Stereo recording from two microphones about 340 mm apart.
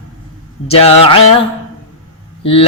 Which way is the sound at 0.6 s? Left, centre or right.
Centre.